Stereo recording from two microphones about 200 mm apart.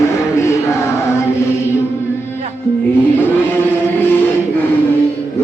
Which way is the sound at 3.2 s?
10° left (ahead or behind).